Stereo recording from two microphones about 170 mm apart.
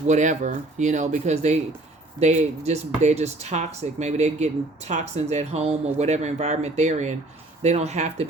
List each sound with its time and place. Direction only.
0.1 s speech: 45° right (ahead or behind)